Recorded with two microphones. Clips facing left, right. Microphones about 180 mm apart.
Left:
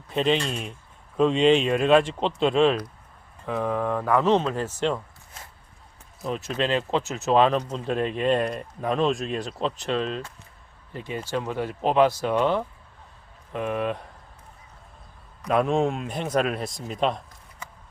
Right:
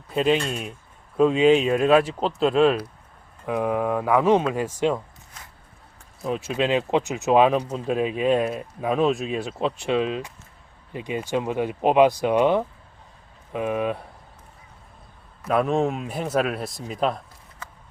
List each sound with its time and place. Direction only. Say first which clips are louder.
0.1 s speech: right 2 dB; 5° right (ahead or behind)
6.2 s speech: right 3 dB; 10° right (ahead or behind)
15.4 s speech: right 1 dB; 5° right (ahead or behind)